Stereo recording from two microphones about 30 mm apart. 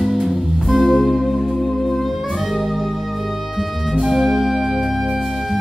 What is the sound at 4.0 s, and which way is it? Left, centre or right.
Music, centre.